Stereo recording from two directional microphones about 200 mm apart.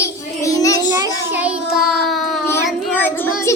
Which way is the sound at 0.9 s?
15° right (ahead or behind).